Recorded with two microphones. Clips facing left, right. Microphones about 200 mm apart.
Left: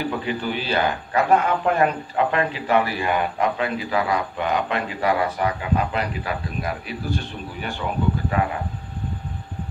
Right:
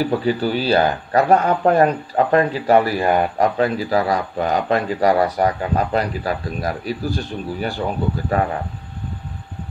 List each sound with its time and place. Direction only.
0.0 s speech: 35° right (ahead or behind)